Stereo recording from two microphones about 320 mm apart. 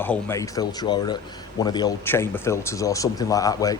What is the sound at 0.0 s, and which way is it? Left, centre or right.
A man's voice, centre.